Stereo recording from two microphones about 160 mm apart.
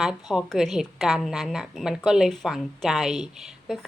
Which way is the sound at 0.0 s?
Centre (ahead or behind).